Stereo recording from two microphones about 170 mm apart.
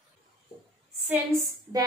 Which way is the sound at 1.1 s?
15° right (ahead or behind).